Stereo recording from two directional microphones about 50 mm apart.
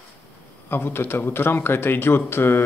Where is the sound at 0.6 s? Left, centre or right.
Left.